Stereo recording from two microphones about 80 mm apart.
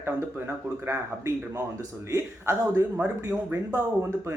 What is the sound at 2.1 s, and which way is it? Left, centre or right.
Speech, right.